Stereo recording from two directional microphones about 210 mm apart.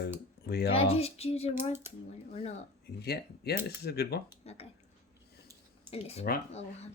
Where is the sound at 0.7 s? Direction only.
30° left (ahead or behind).